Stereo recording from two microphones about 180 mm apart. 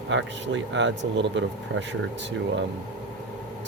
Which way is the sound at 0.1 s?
90° right.